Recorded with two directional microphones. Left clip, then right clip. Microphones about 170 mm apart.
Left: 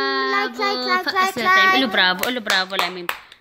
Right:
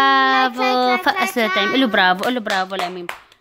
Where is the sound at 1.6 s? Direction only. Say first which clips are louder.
Even; 40° right (ahead or behind); by 2.8 s 25° right (ahead or behind).